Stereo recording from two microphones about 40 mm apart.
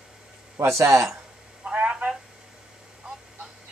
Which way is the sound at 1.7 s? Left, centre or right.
Right.